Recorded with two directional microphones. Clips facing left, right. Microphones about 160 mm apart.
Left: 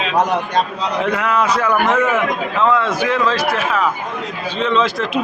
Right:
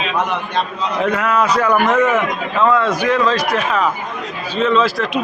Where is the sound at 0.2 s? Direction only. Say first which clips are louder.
Left 5 dB; 40° left (ahead or behind).